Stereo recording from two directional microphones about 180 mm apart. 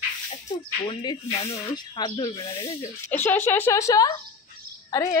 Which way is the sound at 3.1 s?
10° left (ahead or behind).